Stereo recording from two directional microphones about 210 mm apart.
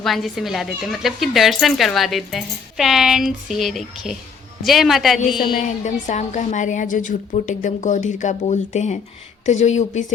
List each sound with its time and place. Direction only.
0.0 s speech: centre (ahead or behind)
5.4 s a woman's voice: 40° left (ahead or behind)